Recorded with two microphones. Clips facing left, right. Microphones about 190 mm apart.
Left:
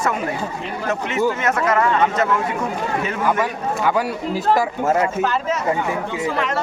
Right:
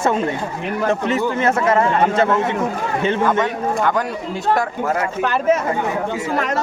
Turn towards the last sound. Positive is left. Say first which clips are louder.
# right 4 dB
turn(degrees=-60)  # may be behind; listen again after turning